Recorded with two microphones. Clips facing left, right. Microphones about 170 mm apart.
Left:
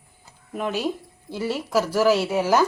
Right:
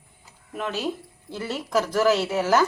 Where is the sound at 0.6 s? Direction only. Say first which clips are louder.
Left 2 dB; 15° left (ahead or behind).